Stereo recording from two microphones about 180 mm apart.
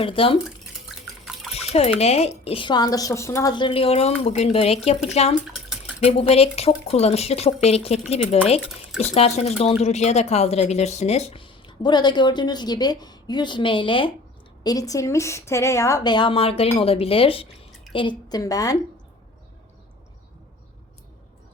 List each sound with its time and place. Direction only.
0.0 s a woman's voice: 30° left (ahead or behind)
0.4 s drip: centre (ahead or behind)
1.5 s a woman's voice: 35° left (ahead or behind); by 18.8 s 20° left (ahead or behind)